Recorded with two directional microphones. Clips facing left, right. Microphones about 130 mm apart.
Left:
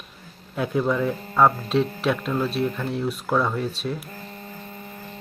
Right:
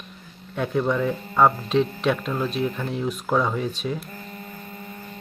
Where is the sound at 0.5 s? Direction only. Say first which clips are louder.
Even; 5° left (ahead or behind).